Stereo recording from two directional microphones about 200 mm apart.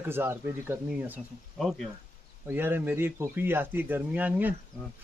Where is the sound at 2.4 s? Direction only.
10° right (ahead or behind).